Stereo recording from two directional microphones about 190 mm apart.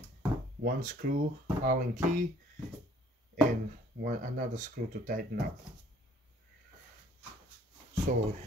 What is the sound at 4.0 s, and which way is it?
Speech, 45° right (ahead or behind).